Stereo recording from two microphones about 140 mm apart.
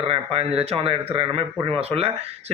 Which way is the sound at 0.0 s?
45° right (ahead or behind).